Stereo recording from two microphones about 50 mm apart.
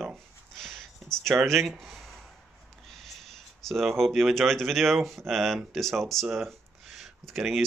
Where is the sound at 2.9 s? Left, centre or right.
Centre.